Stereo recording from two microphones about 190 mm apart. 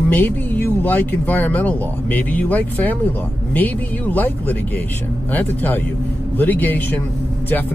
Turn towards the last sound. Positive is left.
turn(degrees=10)  # may be behind; listen again after turning